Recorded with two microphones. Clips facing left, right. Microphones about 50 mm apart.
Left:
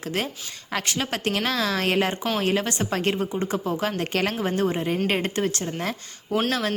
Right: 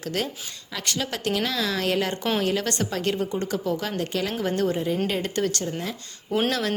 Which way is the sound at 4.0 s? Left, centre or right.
Left.